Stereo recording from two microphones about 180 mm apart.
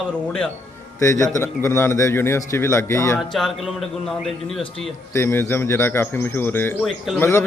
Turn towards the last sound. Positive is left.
turn(degrees=15)  # may be behind; listen again after turning